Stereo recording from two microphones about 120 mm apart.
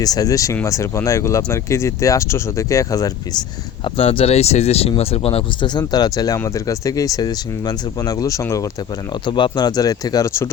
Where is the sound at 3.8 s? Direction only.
50° left (ahead or behind).